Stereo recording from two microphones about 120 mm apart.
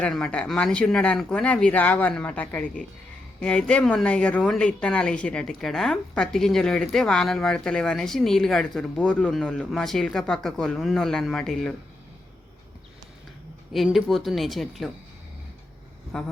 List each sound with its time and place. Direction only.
0.0 s speech: 10° left (ahead or behind)
13.7 s speech: centre (ahead or behind)
16.1 s speech: 5° left (ahead or behind)